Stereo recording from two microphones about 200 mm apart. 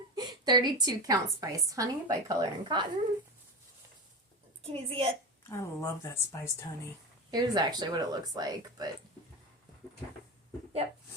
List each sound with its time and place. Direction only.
0.2 s a woman's voice: 20° right (ahead or behind)
4.6 s a woman's voice: 30° right (ahead or behind)
5.4 s a woman's voice: 15° left (ahead or behind)
7.3 s a woman's voice: 20° right (ahead or behind)